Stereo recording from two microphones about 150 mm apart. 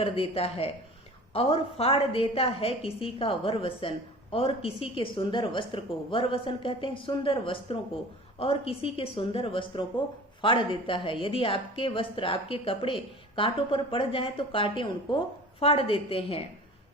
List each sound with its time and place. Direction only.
0.0 s a woman's voice: 40° left (ahead or behind)